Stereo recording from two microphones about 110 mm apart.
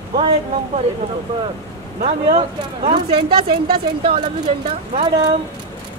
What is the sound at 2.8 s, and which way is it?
Speech, 50° right (ahead or behind).